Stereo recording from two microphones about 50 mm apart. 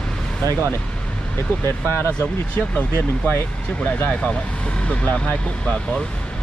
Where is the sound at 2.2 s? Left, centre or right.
Left.